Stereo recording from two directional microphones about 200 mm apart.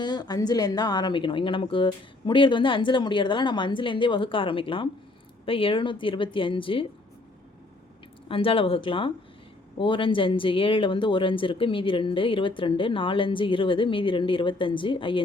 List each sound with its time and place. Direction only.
0.0 s speech: 20° left (ahead or behind)
8.3 s speech: 25° left (ahead or behind)